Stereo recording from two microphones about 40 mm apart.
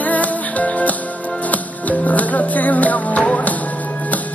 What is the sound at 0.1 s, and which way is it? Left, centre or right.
Music, left.